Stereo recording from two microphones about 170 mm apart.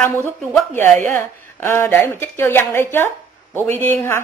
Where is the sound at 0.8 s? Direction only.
45° right (ahead or behind).